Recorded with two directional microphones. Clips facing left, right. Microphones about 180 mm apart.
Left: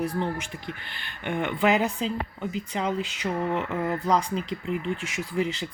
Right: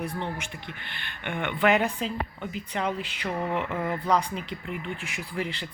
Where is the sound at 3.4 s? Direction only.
Centre (ahead or behind).